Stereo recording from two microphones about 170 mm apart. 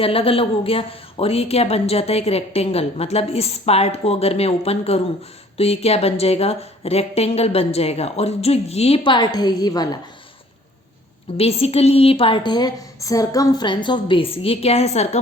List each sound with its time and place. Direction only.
0.0 s a woman's voice: 35° left (ahead or behind)
11.3 s a woman's voice: 35° left (ahead or behind)